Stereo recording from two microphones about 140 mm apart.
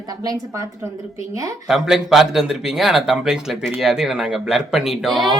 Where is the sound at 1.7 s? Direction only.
5° right (ahead or behind).